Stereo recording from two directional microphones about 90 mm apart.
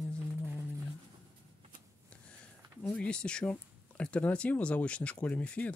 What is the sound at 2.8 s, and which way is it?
Speech, 10° left (ahead or behind).